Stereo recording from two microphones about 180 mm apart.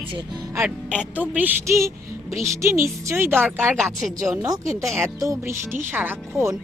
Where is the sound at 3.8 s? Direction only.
Centre (ahead or behind).